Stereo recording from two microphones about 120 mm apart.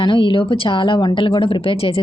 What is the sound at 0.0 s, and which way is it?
Speech, 45° left (ahead or behind).